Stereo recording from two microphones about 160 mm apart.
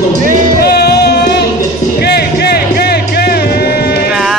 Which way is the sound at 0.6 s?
85° left.